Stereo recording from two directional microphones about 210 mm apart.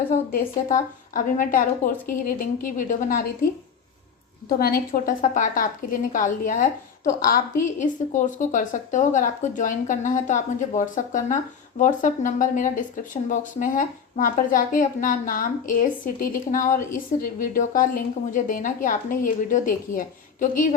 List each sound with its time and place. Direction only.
0.1 s a woman's voice: 40° left (ahead or behind)
4.4 s a woman's voice: 45° left (ahead or behind)